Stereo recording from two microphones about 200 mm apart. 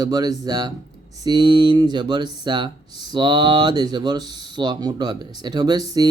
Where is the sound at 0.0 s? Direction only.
20° right (ahead or behind).